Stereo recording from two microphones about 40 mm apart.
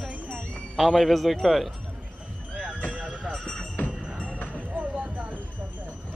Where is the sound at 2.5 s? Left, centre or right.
Right.